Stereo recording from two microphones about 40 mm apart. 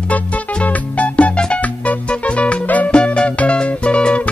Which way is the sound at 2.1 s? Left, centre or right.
Left.